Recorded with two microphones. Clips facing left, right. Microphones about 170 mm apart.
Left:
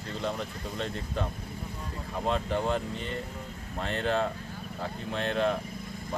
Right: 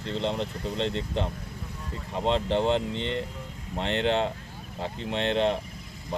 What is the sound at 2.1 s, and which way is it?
Speech, 25° right (ahead or behind).